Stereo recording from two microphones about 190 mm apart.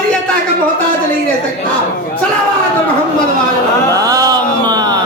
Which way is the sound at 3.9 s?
20° right (ahead or behind).